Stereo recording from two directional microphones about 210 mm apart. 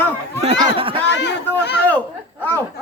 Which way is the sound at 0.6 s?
25° right (ahead or behind).